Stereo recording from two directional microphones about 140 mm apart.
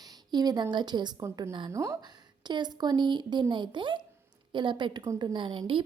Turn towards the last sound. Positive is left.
turn(degrees=-35)  # may be behind; listen again after turning